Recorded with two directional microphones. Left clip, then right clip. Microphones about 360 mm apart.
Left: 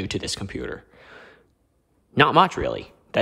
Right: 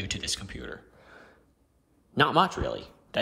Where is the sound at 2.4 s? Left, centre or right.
Centre.